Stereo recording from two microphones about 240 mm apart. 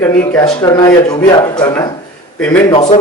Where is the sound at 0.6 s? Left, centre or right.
Centre.